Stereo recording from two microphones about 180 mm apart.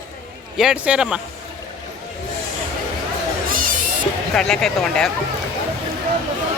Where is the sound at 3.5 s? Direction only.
50° right (ahead or behind).